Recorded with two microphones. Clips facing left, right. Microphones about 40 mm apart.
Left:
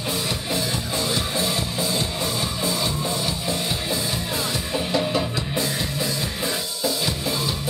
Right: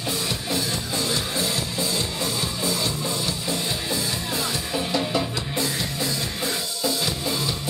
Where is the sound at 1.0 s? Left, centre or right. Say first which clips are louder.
Left 2 dB; centre.